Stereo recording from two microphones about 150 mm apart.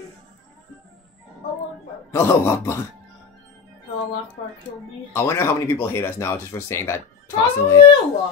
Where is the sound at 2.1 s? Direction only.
15° left (ahead or behind).